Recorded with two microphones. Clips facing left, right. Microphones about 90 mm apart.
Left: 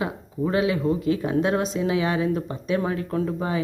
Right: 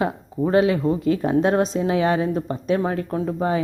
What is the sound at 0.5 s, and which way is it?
A woman's voice, 40° right (ahead or behind).